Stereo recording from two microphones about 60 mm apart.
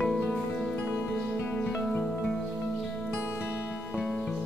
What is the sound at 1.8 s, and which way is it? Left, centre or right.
Music, centre.